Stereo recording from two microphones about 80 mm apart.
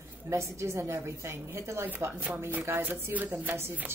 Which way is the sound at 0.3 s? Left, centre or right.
Right.